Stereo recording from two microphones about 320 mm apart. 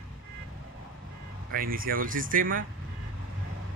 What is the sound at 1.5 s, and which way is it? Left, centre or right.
Speech, right.